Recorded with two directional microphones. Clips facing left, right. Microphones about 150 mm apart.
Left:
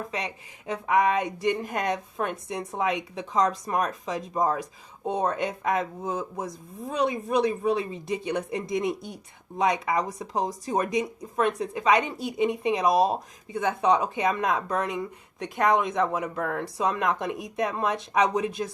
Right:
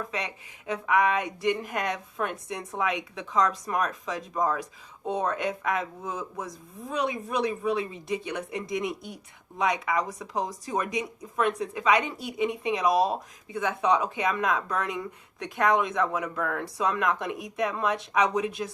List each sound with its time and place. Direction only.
0.7 s speech: 30° left (ahead or behind)